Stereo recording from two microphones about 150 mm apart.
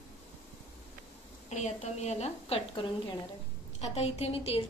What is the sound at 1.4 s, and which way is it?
A woman's voice, 50° left (ahead or behind).